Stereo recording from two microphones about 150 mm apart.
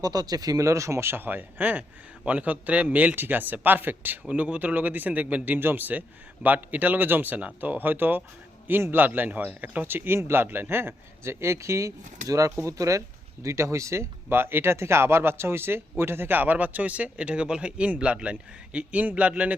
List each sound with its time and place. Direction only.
0.0 s speech: 25° right (ahead or behind); by 19.5 s 10° right (ahead or behind)